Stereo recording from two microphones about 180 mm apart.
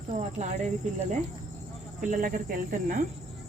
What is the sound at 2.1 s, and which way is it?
Speech, 50° right (ahead or behind).